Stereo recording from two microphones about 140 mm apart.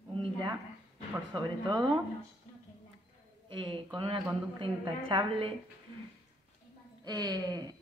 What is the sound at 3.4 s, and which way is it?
A woman's voice, 35° right (ahead or behind).